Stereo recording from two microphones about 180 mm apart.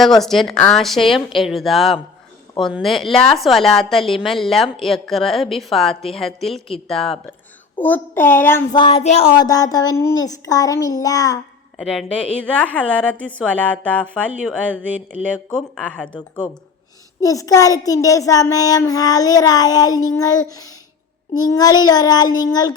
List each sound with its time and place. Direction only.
0.2 s a woman's voice: centre (ahead or behind)
8.7 s a child's voice: 30° left (ahead or behind)
11.8 s a woman's voice: centre (ahead or behind)
17.2 s a child's voice: 20° left (ahead or behind)